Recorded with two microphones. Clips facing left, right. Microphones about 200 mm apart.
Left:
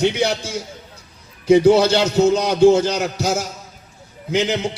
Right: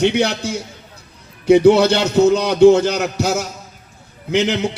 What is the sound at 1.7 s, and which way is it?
Speech, 60° right (ahead or behind).